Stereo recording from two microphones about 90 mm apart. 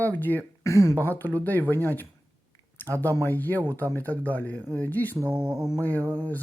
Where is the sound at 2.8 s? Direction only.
20° left (ahead or behind).